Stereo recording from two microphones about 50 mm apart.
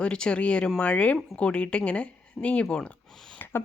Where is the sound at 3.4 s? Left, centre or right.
Left.